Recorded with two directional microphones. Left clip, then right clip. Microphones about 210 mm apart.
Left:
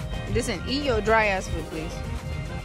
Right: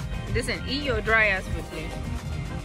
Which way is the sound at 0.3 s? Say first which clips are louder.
Left 1 dB; 20° left (ahead or behind).